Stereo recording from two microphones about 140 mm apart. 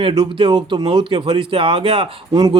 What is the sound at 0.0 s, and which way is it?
Speech, 35° right (ahead or behind).